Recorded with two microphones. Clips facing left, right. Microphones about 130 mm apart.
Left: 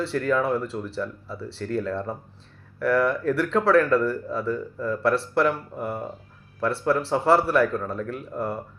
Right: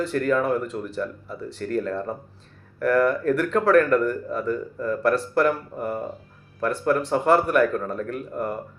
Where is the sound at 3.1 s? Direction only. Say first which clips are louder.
Right 2 dB; 25° left (ahead or behind).